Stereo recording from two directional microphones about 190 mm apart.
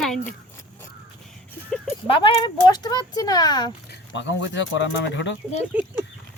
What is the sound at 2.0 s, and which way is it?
Speech, 25° left (ahead or behind).